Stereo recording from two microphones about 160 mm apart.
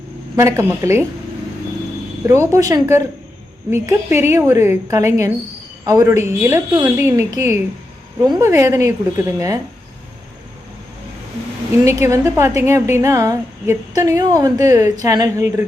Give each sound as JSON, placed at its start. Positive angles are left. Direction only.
{"t": 0.3, "sound": "a woman's voice", "side_deg": -20}
{"t": 2.2, "sound": "a woman's voice", "side_deg": -15}
{"t": 11.9, "sound": "a woman's voice", "side_deg": -20}